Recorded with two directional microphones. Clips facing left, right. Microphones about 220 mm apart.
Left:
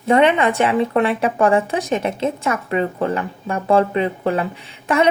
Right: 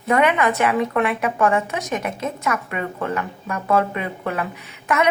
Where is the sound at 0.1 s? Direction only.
30° left (ahead or behind).